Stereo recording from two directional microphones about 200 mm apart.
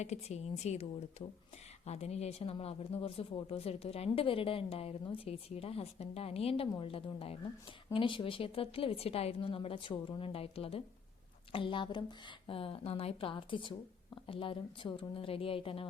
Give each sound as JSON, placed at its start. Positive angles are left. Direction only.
{"t": 0.0, "sound": "a woman's voice", "side_deg": 35}